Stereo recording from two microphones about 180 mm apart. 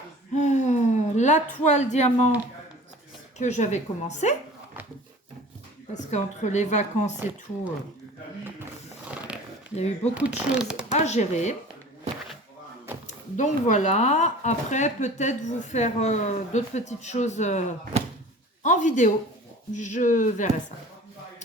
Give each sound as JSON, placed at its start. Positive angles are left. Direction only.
{"t": 0.3, "sound": "speech", "side_deg": 40}
{"t": 3.3, "sound": "speech", "side_deg": 40}
{"t": 5.9, "sound": "speech", "side_deg": 40}
{"t": 9.0, "sound": "a sound", "side_deg": -5}
{"t": 9.7, "sound": "speech", "side_deg": 35}
{"t": 10.2, "sound": "speech", "side_deg": -5}
{"t": 10.9, "sound": "speech", "side_deg": 40}
{"t": 13.1, "sound": "speech", "side_deg": 40}
{"t": 18.6, "sound": "speech", "side_deg": 45}